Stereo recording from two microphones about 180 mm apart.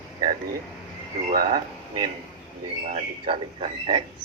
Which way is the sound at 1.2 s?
45° right (ahead or behind).